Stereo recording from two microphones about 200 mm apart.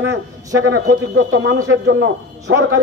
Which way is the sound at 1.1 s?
75° right (ahead or behind).